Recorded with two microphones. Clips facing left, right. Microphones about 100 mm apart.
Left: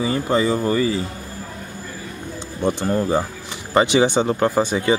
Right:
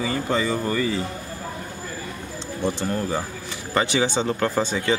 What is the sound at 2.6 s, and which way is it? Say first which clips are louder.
Speech: left 5 dB; 15° left (ahead or behind).